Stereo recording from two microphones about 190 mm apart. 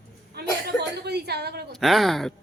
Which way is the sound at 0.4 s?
60° right (ahead or behind).